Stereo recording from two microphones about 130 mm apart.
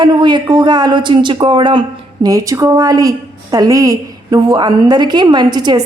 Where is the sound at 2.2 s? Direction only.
25° right (ahead or behind).